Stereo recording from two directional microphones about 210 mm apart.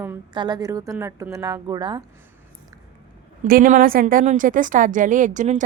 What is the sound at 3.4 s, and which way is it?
A woman's voice, 40° right (ahead or behind).